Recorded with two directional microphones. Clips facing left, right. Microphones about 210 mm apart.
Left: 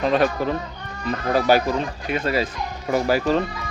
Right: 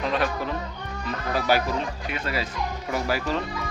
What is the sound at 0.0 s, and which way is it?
Speech, 40° left (ahead or behind).